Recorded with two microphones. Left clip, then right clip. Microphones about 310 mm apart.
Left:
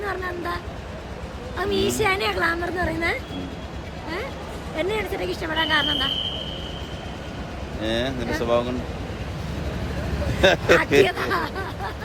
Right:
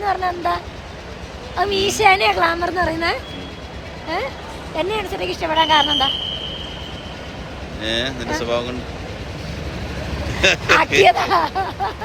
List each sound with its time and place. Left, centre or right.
0.0 s a woman's voice: centre
4.8 s a woman's voice: centre
7.8 s speech: centre
10.4 s speech: centre
11.0 s a woman's voice: centre